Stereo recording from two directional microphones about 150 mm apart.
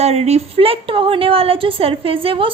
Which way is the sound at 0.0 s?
45° right (ahead or behind).